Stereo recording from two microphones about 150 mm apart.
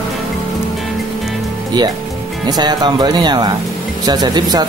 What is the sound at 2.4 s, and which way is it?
Speech, 30° right (ahead or behind).